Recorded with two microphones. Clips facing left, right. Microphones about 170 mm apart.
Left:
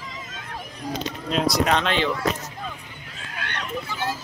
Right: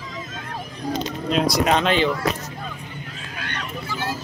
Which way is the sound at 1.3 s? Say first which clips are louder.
Right 2 dB; centre (ahead or behind).